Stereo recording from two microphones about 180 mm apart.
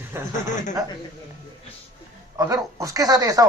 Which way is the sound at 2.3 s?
20° right (ahead or behind).